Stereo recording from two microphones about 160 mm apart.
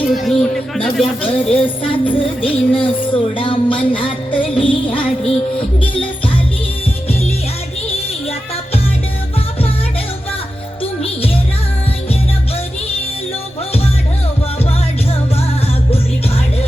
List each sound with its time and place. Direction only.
0.1 s speech: centre (ahead or behind)
1.0 s music: 35° left (ahead or behind)